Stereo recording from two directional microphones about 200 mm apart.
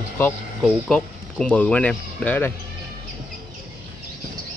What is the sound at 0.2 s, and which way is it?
Speech, 10° left (ahead or behind).